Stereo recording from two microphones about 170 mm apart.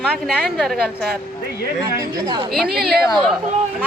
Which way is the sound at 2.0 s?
25° right (ahead or behind).